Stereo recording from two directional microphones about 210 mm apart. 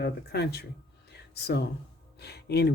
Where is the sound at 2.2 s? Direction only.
50° left (ahead or behind).